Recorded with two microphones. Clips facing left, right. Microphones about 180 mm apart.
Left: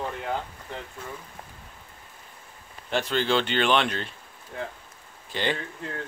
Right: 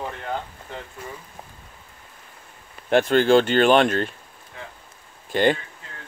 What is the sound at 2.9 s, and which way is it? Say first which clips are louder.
Speech: right 9 dB; 55° right (ahead or behind).